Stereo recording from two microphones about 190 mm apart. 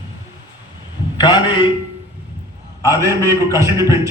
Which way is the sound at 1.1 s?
25° left (ahead or behind).